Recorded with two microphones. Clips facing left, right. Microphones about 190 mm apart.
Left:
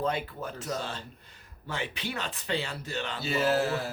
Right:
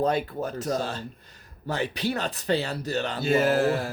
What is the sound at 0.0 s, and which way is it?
Speech, 40° right (ahead or behind).